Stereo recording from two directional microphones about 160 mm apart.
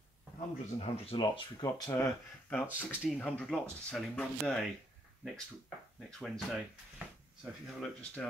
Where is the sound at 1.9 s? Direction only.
10° left (ahead or behind).